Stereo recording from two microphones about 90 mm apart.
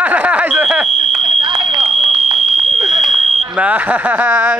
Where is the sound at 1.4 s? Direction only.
60° right (ahead or behind).